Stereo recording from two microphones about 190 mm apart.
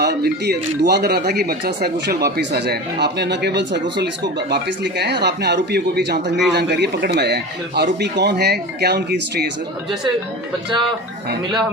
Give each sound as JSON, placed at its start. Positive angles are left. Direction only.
{"t": 0.0, "sound": "speech", "side_deg": -60}